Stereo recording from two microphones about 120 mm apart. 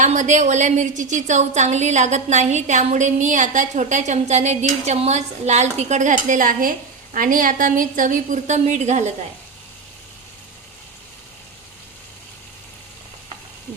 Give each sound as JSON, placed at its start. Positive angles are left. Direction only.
{"t": 0.0, "sound": "a woman's voice", "side_deg": -80}